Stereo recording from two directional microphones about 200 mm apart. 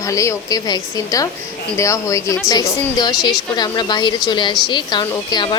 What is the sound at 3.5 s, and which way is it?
A woman's voice, 20° left (ahead or behind).